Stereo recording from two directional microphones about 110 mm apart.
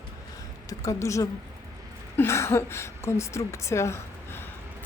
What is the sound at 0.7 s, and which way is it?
A woman's voice, 30° left (ahead or behind).